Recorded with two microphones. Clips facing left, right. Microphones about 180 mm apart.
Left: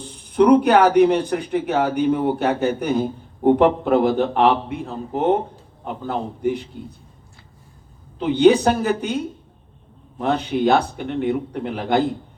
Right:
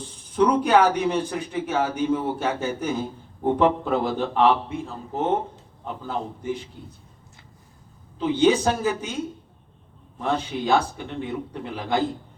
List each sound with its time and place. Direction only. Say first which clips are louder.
0.3 s speech: left 5 dB; 65° left (ahead or behind)
8.2 s speech: left 5 dB; 65° left (ahead or behind)
10.2 s speech: left 5 dB; 65° left (ahead or behind)